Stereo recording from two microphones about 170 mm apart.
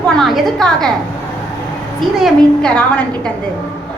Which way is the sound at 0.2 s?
Centre (ahead or behind).